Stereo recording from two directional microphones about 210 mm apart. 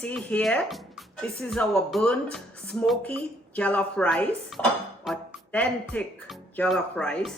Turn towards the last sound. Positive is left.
turn(degrees=5)  # may be behind; listen again after turning